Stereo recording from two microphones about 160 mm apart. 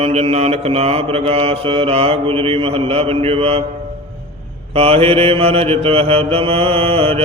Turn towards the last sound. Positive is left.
turn(degrees=-35)  # may be behind; listen again after turning